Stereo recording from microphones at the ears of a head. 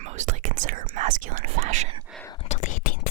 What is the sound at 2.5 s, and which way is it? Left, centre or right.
Whispering, left.